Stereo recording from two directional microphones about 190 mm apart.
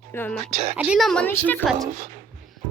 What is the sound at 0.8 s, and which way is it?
Speech, centre (ahead or behind).